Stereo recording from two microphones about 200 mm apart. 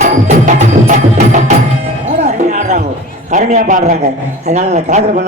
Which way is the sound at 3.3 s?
40° right (ahead or behind).